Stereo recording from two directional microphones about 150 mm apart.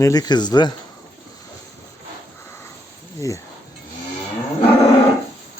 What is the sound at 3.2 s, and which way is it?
Speech, 20° left (ahead or behind).